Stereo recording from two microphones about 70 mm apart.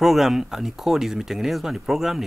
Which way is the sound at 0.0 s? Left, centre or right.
Centre.